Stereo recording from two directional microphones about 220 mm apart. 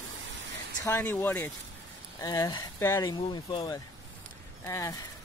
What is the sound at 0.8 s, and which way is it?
Speech, 10° left (ahead or behind).